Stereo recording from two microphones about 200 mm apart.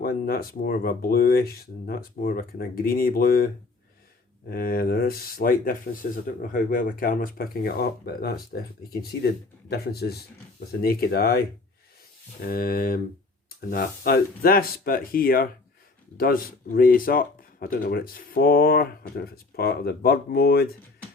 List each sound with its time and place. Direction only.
0.0 s speech: 50° left (ahead or behind)
12.5 s speech: 45° left (ahead or behind)